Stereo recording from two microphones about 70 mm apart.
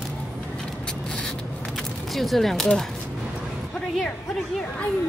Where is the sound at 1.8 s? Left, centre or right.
Centre.